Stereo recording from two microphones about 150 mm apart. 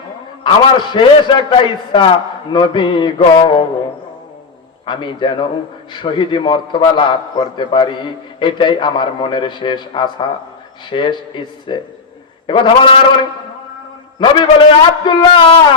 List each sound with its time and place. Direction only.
0.4 s a man's voice: 30° left (ahead or behind)
4.9 s a man's voice: 30° left (ahead or behind)
14.2 s a man's voice: 35° left (ahead or behind)